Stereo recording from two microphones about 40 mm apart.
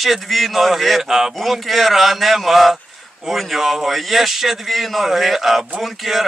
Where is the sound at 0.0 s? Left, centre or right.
Centre.